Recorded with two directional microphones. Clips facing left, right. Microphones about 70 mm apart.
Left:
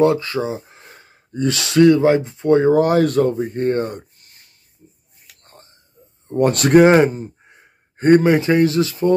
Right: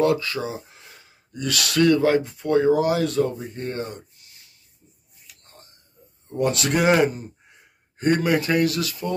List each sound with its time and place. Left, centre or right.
0.0 s speech: left
2.8 s speech: left
5.2 s a sound: left
6.2 s speech: left
6.8 s speech: left